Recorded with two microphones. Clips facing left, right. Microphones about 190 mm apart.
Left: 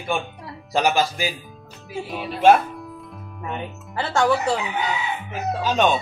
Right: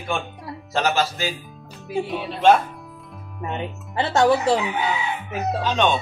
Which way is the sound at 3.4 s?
20° right (ahead or behind).